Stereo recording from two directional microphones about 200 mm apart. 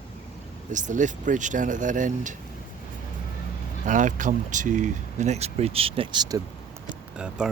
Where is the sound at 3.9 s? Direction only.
40° right (ahead or behind); by 6.4 s 20° right (ahead or behind).